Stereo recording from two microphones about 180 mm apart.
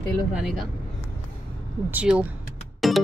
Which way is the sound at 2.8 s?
Centre (ahead or behind).